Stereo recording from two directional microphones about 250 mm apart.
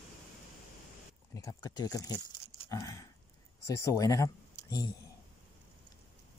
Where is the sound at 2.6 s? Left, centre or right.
Centre.